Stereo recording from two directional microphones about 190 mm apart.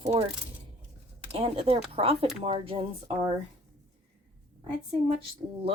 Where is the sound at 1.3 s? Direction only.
30° right (ahead or behind).